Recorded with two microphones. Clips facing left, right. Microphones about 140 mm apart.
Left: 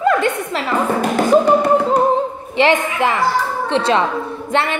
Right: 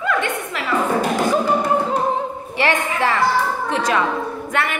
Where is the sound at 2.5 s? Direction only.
20° left (ahead or behind).